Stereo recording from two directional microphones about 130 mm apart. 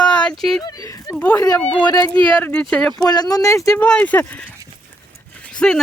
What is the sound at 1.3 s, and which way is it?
Speech, 30° left (ahead or behind).